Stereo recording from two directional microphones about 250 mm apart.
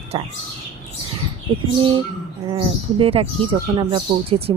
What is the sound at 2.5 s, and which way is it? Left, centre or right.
Speech, right.